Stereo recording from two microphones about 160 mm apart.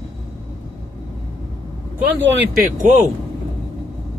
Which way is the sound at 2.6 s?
50° right (ahead or behind).